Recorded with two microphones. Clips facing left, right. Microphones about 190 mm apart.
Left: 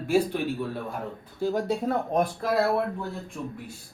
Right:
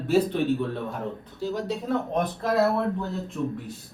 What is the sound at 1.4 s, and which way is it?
Speech, 50° left (ahead or behind).